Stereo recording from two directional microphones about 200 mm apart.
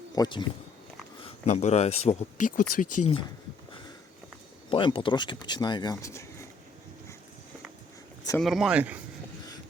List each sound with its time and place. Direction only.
0.2 s speech: 20° left (ahead or behind)
1.2 s speech: 35° left (ahead or behind)
2.6 s speech: 45° left (ahead or behind)
4.7 s speech: 25° left (ahead or behind)
8.4 s speech: centre (ahead or behind)